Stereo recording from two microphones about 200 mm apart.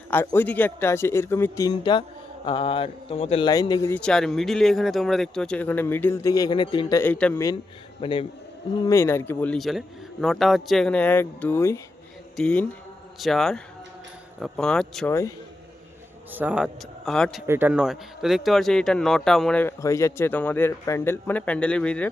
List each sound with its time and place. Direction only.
0.1 s speech: 10° left (ahead or behind)
8.0 s a man's voice: 25° left (ahead or behind)
8.8 s speech: 15° left (ahead or behind)
16.3 s speech: 10° right (ahead or behind)
17.4 s speech: 10° right (ahead or behind); by 22.1 s 5° left (ahead or behind)